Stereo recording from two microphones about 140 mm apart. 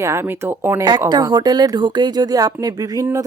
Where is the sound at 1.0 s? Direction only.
30° right (ahead or behind).